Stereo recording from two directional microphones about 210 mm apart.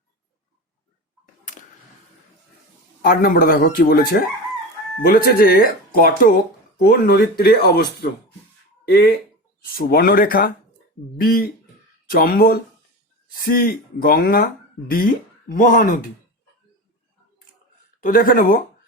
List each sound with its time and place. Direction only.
3.0 s speech: 45° left (ahead or behind)
18.0 s speech: 45° left (ahead or behind)